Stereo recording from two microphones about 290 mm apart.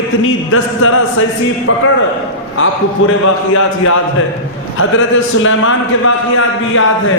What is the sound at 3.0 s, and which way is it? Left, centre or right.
Speech, left.